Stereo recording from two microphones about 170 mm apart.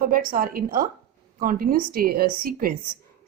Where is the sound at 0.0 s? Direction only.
55° right (ahead or behind).